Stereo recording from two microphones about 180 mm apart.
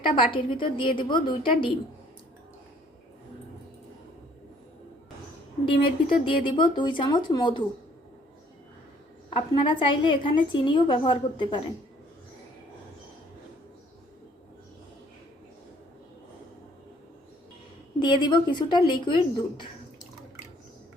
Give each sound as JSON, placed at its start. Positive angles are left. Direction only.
{"t": 0.0, "sound": "a woman's voice", "side_deg": 30}
{"t": 6.2, "sound": "a woman's voice", "side_deg": 25}
{"t": 9.3, "sound": "a woman's voice", "side_deg": 30}
{"t": 18.0, "sound": "a woman's voice", "side_deg": 25}